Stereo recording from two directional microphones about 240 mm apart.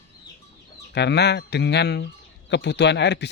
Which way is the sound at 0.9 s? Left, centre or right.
Left.